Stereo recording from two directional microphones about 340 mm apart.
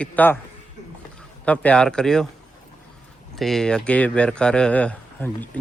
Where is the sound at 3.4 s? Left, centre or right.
Centre.